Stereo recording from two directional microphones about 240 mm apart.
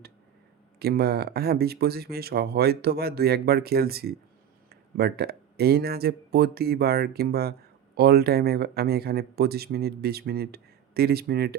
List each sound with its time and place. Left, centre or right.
0.8 s speech: right